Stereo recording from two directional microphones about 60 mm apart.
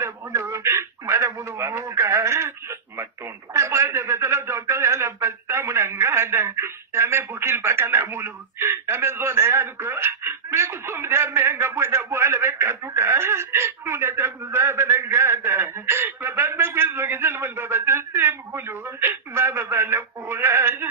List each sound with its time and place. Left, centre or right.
0.0 s a man's voice: right
3.5 s radio: right